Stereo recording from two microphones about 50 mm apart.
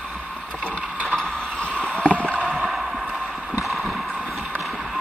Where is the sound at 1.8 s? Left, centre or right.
Left.